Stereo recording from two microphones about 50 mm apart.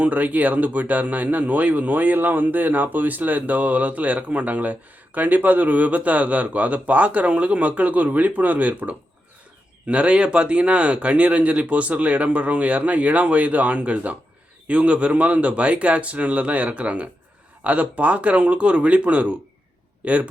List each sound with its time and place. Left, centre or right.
0.0 s speech: right